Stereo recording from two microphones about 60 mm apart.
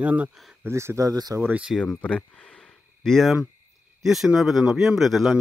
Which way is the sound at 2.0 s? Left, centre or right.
Centre.